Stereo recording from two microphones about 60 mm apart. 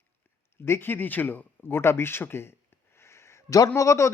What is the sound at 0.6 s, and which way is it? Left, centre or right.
Speech, left.